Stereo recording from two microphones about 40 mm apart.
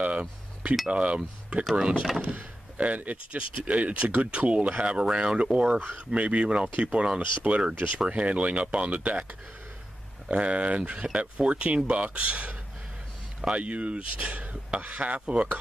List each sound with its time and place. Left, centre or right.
0.0 s chink: right
0.8 s speech: right
2.2 s speech: right
10.3 s speech: right